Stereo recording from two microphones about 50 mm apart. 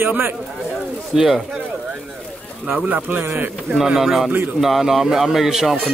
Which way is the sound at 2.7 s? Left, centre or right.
Right.